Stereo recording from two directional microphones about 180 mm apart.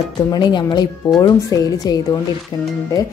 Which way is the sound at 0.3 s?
25° left (ahead or behind).